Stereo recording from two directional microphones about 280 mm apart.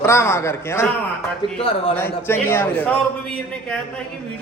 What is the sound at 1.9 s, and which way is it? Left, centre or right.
A man's voice, centre.